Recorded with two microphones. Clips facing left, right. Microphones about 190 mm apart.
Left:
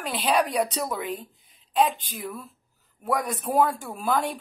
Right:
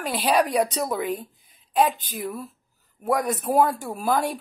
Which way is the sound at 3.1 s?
45° right (ahead or behind).